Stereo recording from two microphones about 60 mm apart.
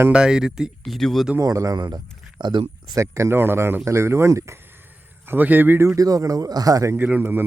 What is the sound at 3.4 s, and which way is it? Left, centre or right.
Speech, right.